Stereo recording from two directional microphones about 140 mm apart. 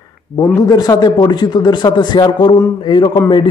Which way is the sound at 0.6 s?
30° left (ahead or behind).